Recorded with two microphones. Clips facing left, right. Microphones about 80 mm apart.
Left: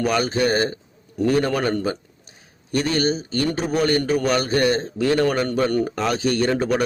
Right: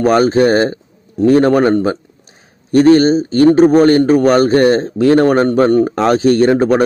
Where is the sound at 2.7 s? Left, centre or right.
Right.